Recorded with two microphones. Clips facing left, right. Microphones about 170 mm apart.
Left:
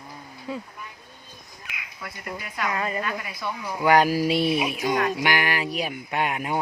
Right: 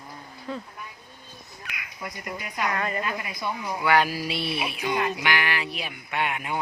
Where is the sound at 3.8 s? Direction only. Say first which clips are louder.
Left 5 dB; 40° left (ahead or behind).